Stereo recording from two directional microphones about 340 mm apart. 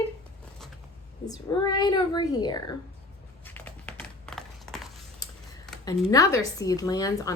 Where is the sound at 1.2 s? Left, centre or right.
Centre.